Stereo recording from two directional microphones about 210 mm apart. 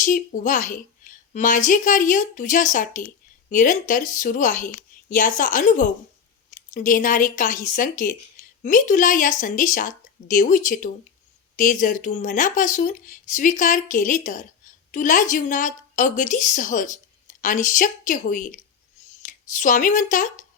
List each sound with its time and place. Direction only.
0.0 s speech: 40° left (ahead or behind)